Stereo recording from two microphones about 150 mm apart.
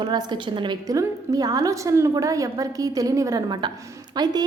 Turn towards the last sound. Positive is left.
turn(degrees=-30)  # may be behind; listen again after turning